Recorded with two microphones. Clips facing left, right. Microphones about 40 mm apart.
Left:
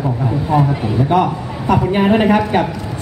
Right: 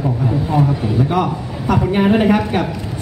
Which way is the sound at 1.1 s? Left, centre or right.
Centre.